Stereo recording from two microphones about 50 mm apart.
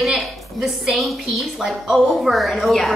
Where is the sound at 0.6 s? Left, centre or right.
Centre.